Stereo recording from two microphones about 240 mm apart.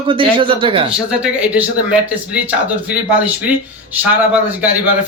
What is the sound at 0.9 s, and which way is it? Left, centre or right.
Speech, centre.